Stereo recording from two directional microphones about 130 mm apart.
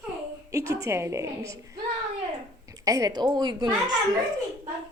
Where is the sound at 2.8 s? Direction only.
25° right (ahead or behind).